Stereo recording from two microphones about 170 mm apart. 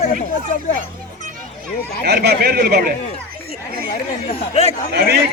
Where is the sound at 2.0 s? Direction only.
70° right (ahead or behind).